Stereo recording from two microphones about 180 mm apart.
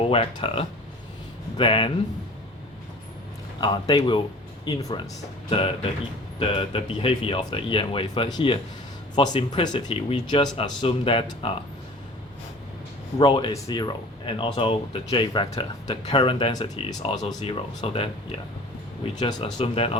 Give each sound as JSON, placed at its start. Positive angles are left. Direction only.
{"t": 0.0, "sound": "speech", "side_deg": 30}
{"t": 3.6, "sound": "speech", "side_deg": 20}
{"t": 13.1, "sound": "speech", "side_deg": 25}